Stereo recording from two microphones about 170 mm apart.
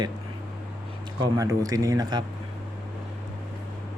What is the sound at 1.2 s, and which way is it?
Speech, 20° right (ahead or behind).